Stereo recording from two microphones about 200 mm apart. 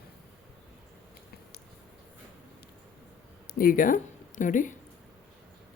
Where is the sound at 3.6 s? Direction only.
45° left (ahead or behind).